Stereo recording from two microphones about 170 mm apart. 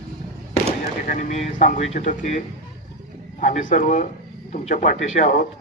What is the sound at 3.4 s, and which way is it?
Speech, 50° left (ahead or behind).